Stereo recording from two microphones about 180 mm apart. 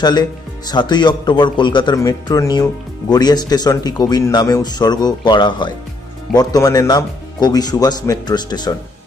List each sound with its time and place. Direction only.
0.0 s speech: 25° left (ahead or behind)